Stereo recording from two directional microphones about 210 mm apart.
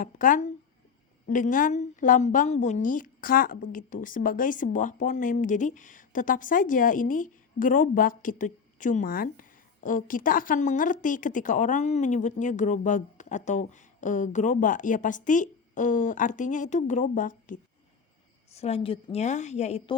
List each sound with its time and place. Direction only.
0.0 s a woman's voice: 40° left (ahead or behind)